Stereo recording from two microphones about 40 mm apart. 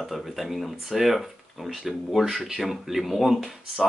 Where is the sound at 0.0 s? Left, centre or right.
Centre.